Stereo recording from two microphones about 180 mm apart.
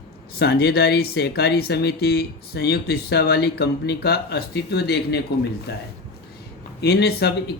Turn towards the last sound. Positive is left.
turn(degrees=60)  # may be behind; listen again after turning